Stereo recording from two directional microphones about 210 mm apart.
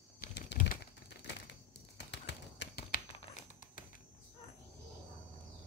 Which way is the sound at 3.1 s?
35° left (ahead or behind).